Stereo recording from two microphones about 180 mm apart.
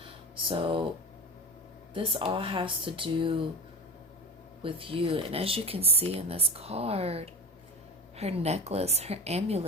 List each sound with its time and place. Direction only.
0.0 s a sound: 30° right (ahead or behind)
1.9 s speech: 30° right (ahead or behind)
4.6 s speech: 30° right (ahead or behind)